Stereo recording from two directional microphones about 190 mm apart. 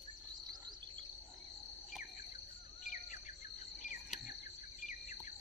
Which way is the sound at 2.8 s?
40° left (ahead or behind).